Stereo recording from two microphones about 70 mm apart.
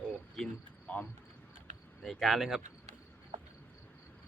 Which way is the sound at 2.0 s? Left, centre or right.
Centre.